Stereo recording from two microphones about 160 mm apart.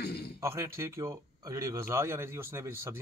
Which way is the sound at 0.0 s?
80° left.